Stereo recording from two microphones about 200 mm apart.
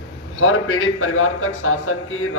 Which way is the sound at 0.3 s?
75° left (ahead or behind).